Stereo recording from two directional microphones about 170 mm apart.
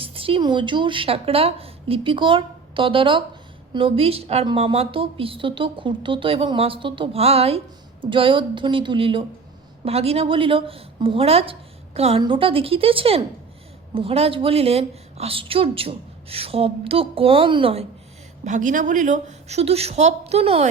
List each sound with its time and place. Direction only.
0.0 s a woman's voice: 35° right (ahead or behind)
18.4 s a woman's voice: 50° right (ahead or behind)